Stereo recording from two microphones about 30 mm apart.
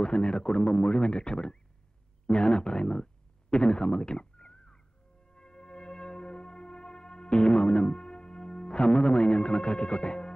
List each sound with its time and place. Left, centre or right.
0.0 s speech: left
5.3 s music: left